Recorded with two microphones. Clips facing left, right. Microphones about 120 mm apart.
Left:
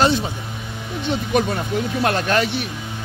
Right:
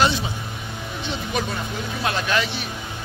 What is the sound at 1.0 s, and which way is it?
Speech, 55° left (ahead or behind).